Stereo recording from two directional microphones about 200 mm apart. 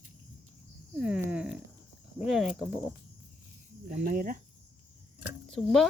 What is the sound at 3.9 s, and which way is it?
Speech, 50° right (ahead or behind).